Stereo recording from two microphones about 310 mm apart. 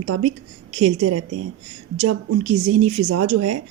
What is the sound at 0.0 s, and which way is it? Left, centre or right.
Speech, right.